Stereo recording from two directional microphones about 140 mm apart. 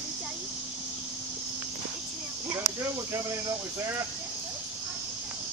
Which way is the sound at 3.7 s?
20° right (ahead or behind).